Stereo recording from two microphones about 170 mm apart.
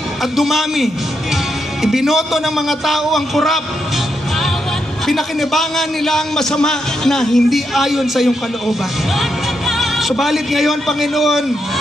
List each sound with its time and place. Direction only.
0.2 s a man's voice: centre (ahead or behind)
5.0 s a man's voice: centre (ahead or behind)